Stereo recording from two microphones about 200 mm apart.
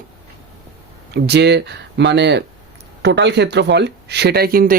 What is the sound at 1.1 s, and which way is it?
Speech, 55° right (ahead or behind).